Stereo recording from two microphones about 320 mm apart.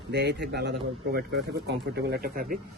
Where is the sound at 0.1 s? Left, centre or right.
Right.